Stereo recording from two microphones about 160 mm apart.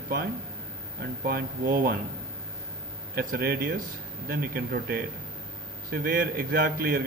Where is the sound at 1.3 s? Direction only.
65° right (ahead or behind).